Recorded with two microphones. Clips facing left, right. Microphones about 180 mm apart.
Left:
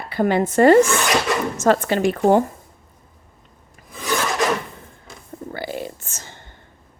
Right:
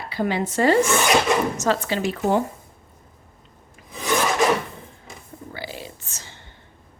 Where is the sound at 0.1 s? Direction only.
50° left (ahead or behind).